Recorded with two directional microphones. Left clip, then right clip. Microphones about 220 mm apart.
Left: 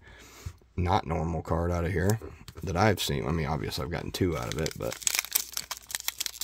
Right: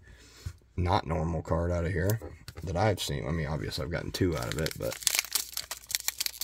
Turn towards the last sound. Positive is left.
turn(degrees=10)  # may be behind; listen again after turning